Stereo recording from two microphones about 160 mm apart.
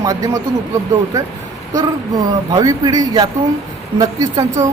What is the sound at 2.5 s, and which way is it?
Speech, 25° right (ahead or behind).